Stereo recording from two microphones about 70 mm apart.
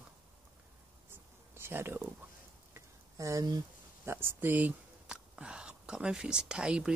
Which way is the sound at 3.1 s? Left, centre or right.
Right.